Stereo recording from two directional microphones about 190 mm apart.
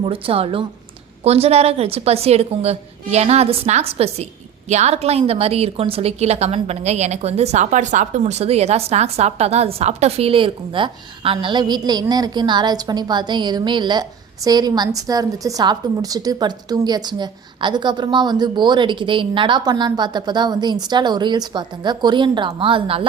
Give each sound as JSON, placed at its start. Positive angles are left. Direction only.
{"t": 0.0, "sound": "a woman's voice", "side_deg": -30}